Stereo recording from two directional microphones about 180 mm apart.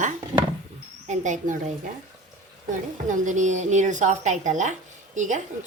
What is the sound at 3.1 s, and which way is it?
Speech, 45° right (ahead or behind).